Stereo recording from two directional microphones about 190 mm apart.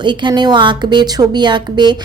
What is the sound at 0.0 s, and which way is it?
A woman's voice, 25° right (ahead or behind).